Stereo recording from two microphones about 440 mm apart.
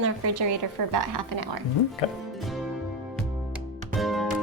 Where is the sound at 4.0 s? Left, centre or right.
Centre.